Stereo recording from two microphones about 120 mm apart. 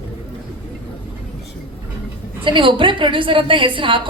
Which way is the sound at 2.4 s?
45° right (ahead or behind).